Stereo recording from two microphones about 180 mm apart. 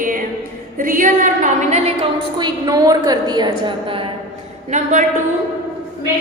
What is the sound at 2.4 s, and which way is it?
A woman's voice, 20° right (ahead or behind).